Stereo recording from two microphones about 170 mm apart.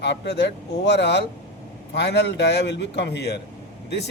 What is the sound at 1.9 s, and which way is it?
Speech, 80° left.